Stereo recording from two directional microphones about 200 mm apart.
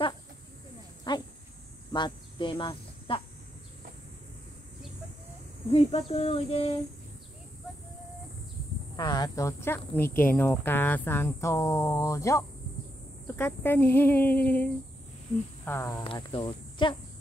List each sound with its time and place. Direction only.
1.1 s insect: 20° left (ahead or behind)
1.9 s speech: 20° left (ahead or behind)
5.7 s speech: 30° left (ahead or behind)
8.9 s speech: 20° left (ahead or behind)
16.0 s speech: 25° left (ahead or behind)